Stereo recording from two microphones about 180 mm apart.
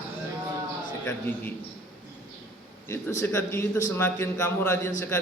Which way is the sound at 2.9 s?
15° left (ahead or behind).